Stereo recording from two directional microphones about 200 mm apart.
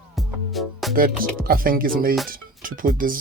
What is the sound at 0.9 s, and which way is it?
Music, 45° right (ahead or behind).